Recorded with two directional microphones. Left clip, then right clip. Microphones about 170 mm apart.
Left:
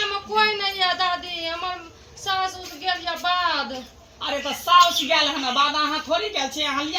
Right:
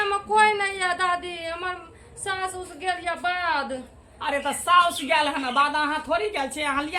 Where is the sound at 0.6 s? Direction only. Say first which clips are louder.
Left 2 dB; 55° right (ahead or behind).